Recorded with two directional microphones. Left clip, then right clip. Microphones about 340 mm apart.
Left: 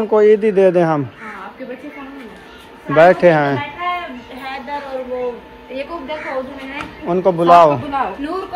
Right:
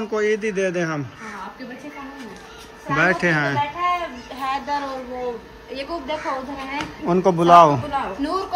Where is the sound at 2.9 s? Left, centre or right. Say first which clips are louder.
Left 9 dB; centre.